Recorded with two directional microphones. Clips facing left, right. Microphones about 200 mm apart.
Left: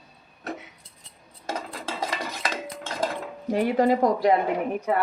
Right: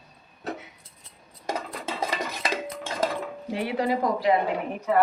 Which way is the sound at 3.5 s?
45° left (ahead or behind).